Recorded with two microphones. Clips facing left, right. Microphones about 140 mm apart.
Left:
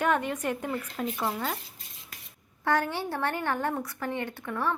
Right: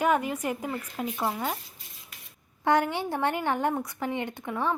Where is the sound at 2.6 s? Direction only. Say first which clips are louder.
Right 3 dB; 15° right (ahead or behind).